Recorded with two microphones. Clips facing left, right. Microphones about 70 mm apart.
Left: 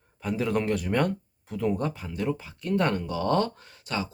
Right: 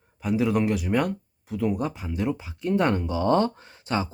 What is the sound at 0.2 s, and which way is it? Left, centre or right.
Speech, centre.